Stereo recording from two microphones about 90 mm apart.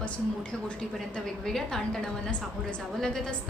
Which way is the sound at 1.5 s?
5° left (ahead or behind).